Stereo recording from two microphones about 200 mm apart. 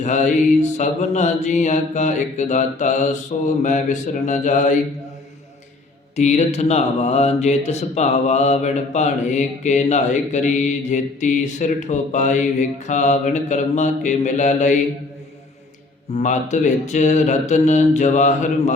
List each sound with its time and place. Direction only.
0.0 s speech: 35° left (ahead or behind)
6.1 s speech: 35° left (ahead or behind)
16.1 s speech: 35° left (ahead or behind)